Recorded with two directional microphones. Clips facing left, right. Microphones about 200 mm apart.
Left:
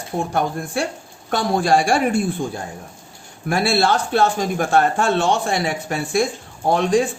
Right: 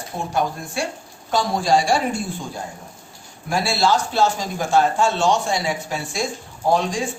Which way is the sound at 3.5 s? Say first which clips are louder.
Left 2 dB; 60° left (ahead or behind).